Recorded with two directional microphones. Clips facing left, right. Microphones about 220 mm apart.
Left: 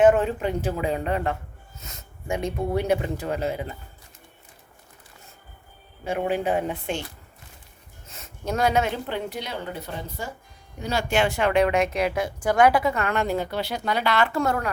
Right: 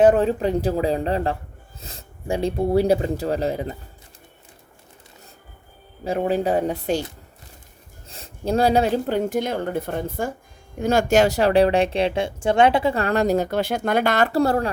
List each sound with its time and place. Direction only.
0.0 s speech: 35° right (ahead or behind)
6.1 s speech: 35° right (ahead or behind)
8.0 s speech: 30° right (ahead or behind)